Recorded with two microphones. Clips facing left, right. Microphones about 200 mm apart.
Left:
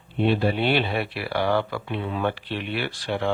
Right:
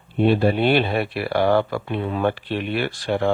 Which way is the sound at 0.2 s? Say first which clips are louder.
Right 4 dB; 45° right (ahead or behind).